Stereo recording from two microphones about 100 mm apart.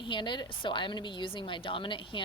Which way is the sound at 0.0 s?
55° left (ahead or behind).